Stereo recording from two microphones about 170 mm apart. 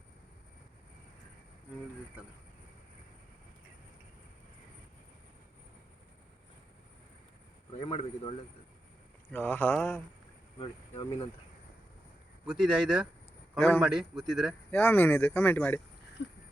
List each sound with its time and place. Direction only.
7.8 s speech: 30° left (ahead or behind)
9.3 s speech: 10° left (ahead or behind)
10.6 s speech: 30° left (ahead or behind)
12.5 s a man's voice: 5° right (ahead or behind)
13.6 s speech: 15° left (ahead or behind)
13.8 s a man's voice: centre (ahead or behind)
14.7 s speech: 10° left (ahead or behind)